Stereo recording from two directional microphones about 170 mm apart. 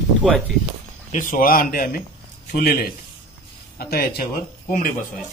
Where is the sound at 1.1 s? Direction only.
50° left (ahead or behind).